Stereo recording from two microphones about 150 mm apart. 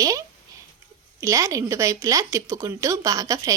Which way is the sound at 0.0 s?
25° right (ahead or behind).